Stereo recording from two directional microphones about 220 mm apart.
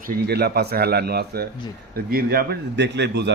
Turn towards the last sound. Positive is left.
turn(degrees=-50)  # may be behind; listen again after turning